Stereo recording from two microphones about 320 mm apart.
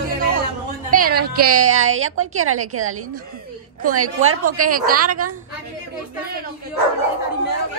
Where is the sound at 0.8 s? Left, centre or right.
Right.